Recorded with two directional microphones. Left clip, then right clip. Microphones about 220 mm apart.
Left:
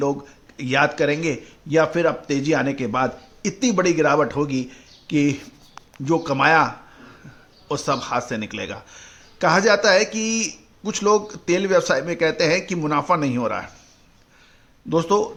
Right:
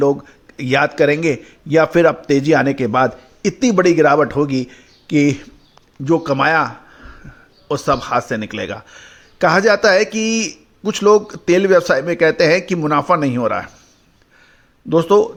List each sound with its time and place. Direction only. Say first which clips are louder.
0.0 s speech: right 8 dB; 25° right (ahead or behind)
14.8 s speech: right 7 dB; 20° right (ahead or behind)